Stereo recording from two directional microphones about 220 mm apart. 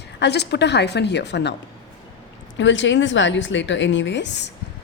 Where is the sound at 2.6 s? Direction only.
55° left (ahead or behind).